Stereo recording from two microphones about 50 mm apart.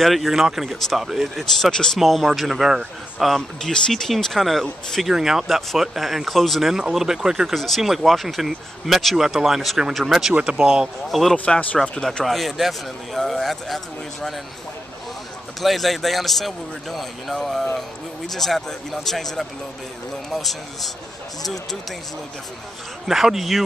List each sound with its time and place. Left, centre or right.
0.0 s speech: centre
1.4 s speech: centre
2.0 s speech: centre
3.2 s speech: centre
5.1 s speech: centre
7.5 s speech: centre
11.1 s speech: centre
11.3 s speech: left
12.3 s speech: centre
15.6 s speech: centre
23.0 s speech: centre